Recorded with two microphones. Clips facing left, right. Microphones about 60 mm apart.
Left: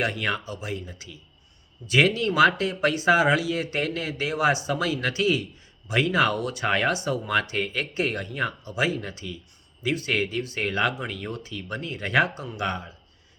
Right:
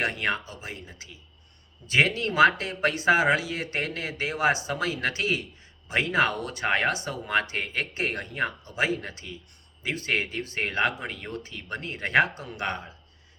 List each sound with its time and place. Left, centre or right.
0.0 s speech: right